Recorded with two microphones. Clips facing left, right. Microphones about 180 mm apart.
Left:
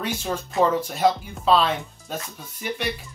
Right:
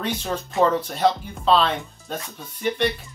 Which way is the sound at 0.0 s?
10° left (ahead or behind).